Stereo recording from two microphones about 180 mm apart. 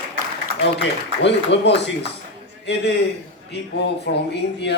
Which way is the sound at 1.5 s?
90° left.